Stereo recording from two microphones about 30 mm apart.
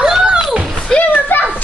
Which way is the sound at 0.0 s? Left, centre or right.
Right.